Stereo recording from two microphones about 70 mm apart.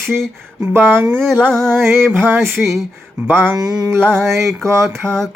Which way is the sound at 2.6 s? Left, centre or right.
Centre.